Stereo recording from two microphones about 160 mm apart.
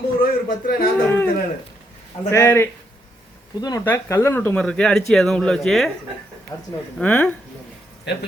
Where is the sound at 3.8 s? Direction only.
15° left (ahead or behind).